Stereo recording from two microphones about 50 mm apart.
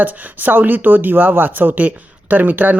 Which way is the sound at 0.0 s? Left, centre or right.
Right.